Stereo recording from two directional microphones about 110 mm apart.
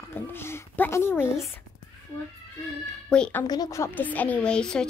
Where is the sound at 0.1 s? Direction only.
20° left (ahead or behind).